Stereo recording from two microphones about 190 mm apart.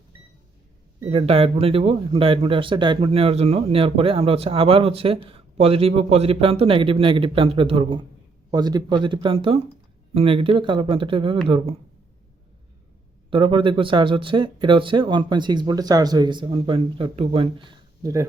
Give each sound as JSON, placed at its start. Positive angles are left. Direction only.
{"t": 1.0, "sound": "speech", "side_deg": -30}
{"t": 13.3, "sound": "speech", "side_deg": -25}